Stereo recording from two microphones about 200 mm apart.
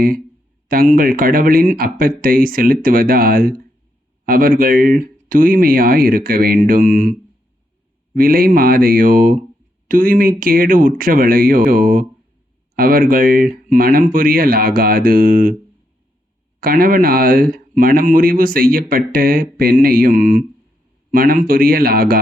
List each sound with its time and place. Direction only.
0.7 s speech: 45° right (ahead or behind)
16.6 s speech: 45° right (ahead or behind)